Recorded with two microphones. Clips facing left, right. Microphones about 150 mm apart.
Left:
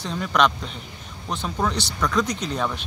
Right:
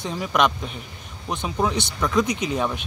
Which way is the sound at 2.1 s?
5° right (ahead or behind).